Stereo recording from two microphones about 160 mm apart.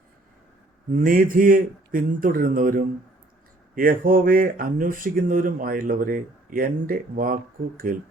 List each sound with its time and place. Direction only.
1.0 s speech: 60° right (ahead or behind)